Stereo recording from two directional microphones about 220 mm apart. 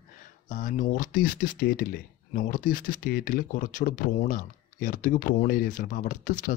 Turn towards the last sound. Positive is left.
turn(degrees=35)  # may be behind; listen again after turning